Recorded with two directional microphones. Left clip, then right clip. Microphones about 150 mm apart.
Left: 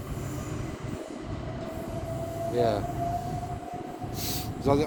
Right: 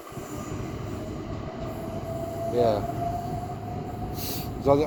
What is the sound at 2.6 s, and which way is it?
Speech, 45° left (ahead or behind).